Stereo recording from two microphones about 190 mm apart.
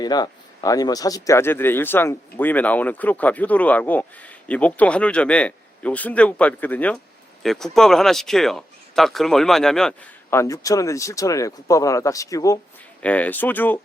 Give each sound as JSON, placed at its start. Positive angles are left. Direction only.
{"t": 0.0, "sound": "speech", "side_deg": 20}
{"t": 10.2, "sound": "speech", "side_deg": 15}
{"t": 13.0, "sound": "speech", "side_deg": 5}